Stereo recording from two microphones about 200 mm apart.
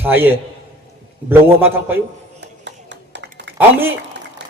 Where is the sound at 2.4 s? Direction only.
60° right (ahead or behind).